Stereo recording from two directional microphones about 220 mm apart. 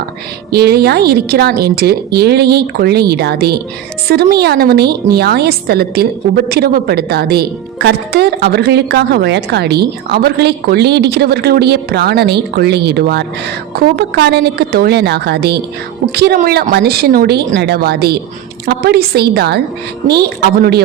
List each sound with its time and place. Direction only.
0.5 s a woman's voice: 45° right (ahead or behind)